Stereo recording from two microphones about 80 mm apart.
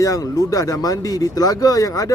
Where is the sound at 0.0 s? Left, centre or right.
Left.